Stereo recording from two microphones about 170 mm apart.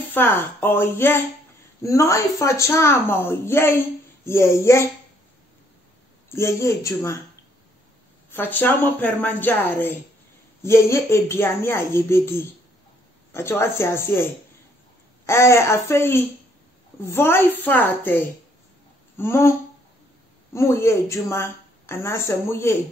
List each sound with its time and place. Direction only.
0.1 s a woman's voice: 10° left (ahead or behind)
6.2 s a woman's voice: 15° left (ahead or behind)
8.3 s a woman's voice: 10° left (ahead or behind)
20.5 s a woman's voice: 15° left (ahead or behind)